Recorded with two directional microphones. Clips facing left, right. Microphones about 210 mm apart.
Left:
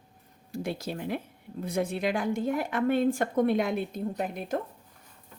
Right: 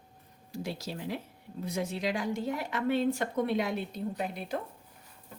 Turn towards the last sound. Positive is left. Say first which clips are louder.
# left 3 dB
turn(degrees=45)  # may be behind; listen again after turning